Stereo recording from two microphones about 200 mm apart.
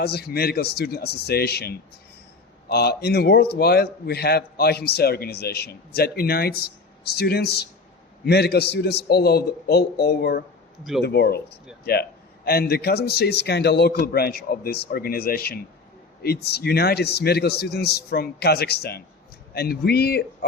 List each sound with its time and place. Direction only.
0.0 s a man's voice: 50° left (ahead or behind)